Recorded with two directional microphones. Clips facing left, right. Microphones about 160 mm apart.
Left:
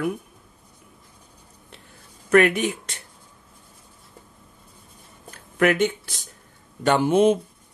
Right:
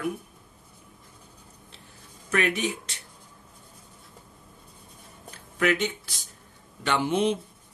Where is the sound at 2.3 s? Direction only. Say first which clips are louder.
Left 8 dB; 55° left (ahead or behind).